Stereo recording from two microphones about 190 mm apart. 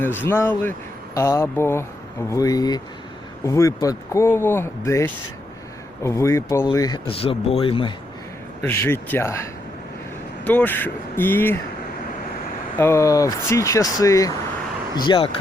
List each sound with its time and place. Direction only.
0.3 s speech: 15° left (ahead or behind)
8.6 s speech: 10° left (ahead or behind)
10.4 s speech: 10° left (ahead or behind)
12.7 s speech: 15° left (ahead or behind)